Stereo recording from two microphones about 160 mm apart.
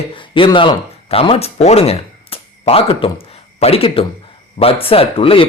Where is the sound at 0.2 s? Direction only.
30° left (ahead or behind).